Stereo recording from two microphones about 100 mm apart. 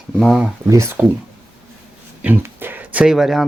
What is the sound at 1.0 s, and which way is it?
Speech, 15° right (ahead or behind).